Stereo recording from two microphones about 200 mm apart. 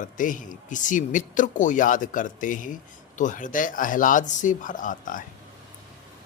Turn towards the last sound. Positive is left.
turn(degrees=40)  # may be behind; listen again after turning